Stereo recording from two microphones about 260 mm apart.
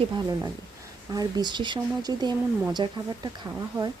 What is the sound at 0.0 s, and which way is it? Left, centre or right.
Speech, centre.